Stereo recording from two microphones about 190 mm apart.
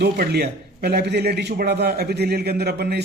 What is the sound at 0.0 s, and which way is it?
A man's voice, 60° right (ahead or behind).